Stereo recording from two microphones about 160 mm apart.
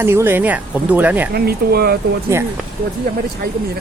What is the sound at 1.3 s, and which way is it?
Speech, 75° right (ahead or behind).